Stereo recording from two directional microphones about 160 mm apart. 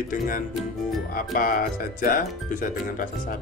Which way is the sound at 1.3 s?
60° left (ahead or behind).